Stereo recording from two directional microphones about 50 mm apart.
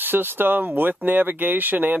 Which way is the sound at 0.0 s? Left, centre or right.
Right.